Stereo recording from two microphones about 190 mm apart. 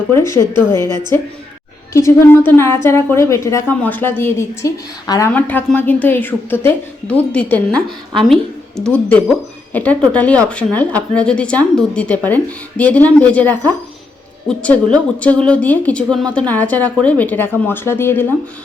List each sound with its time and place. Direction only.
0.1 s a woman's voice: 15° left (ahead or behind)
0.8 s a woman's voice: 20° right (ahead or behind)
1.9 s a woman's voice: 15° left (ahead or behind)